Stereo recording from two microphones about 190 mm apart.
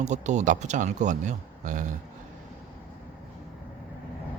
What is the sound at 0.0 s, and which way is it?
Speech, 40° right (ahead or behind).